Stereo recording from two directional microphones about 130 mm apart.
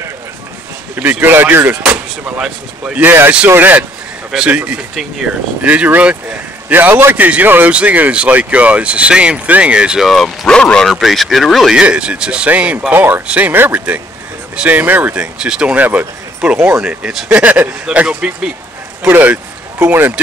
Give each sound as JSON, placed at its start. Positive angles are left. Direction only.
{"t": 0.9, "sound": "a man's voice", "side_deg": -15}